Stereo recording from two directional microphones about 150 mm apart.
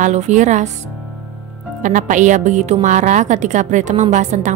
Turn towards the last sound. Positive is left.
turn(degrees=-55)  # may be behind; listen again after turning